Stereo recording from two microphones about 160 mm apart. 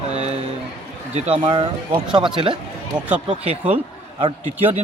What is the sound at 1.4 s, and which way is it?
A man's voice, 35° right (ahead or behind).